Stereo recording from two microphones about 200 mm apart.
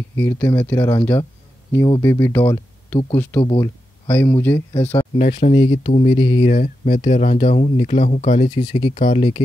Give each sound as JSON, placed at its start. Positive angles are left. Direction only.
{"t": 0.1, "sound": "speech", "side_deg": 10}
{"t": 3.3, "sound": "speech", "side_deg": 25}
{"t": 3.6, "sound": "speech", "side_deg": 10}
{"t": 5.1, "sound": "speech", "side_deg": 30}